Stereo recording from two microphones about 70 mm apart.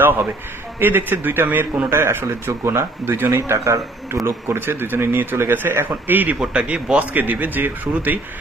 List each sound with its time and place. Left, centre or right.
0.7 s speech: right
3.5 s a man's voice: right
4.5 s speech: right